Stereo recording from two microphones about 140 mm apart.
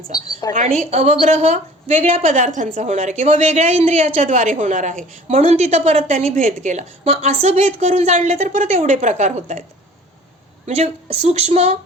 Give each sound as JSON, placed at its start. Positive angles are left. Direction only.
{"t": 0.1, "sound": "a woman's voice", "side_deg": 30}
{"t": 0.5, "sound": "a woman's voice", "side_deg": -55}
{"t": 10.7, "sound": "a woman's voice", "side_deg": -45}